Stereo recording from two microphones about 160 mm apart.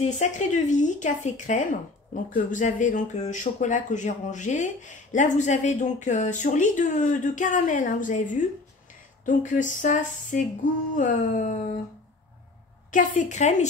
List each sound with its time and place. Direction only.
0.0 s speech: 50° left (ahead or behind)
11.0 s music: 55° left (ahead or behind)
12.9 s speech: 55° left (ahead or behind)